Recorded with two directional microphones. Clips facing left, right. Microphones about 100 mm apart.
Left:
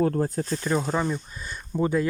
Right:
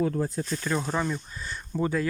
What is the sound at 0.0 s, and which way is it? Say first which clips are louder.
Speech: left 3 dB; 50° left (ahead or behind).